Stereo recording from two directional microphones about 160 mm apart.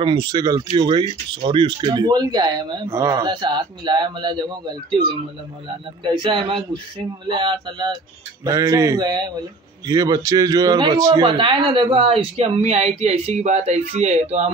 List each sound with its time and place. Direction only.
0.0 s speech: 30° right (ahead or behind)
6.0 s a man's voice: 30° right (ahead or behind)